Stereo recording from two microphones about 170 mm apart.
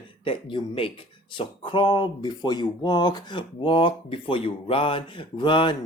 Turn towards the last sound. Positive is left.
turn(degrees=30)  # may be behind; listen again after turning